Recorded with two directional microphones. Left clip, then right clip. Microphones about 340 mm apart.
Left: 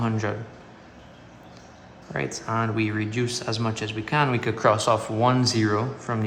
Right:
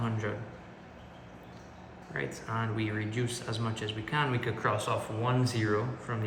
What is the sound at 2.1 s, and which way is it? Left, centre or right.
Speech, centre.